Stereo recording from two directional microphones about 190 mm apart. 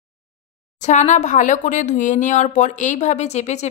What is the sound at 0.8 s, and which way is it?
Speech, 40° left (ahead or behind).